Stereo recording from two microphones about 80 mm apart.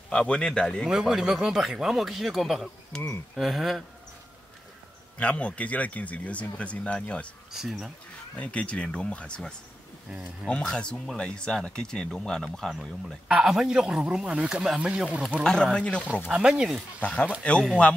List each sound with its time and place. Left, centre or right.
0.1 s speech: centre
0.8 s speech: centre
5.2 s speech: centre
7.5 s speech: centre
8.4 s speech: centre
13.3 s a man's voice: centre
15.4 s speech: centre
16.3 s a man's voice: centre
17.0 s speech: centre